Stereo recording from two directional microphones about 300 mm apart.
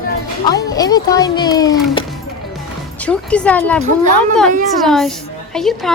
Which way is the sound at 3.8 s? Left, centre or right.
Right.